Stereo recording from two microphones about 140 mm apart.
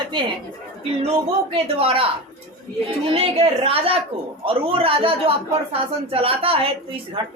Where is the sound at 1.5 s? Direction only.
45° right (ahead or behind).